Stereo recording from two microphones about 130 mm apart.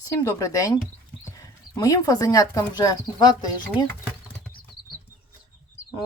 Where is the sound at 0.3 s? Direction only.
25° left (ahead or behind).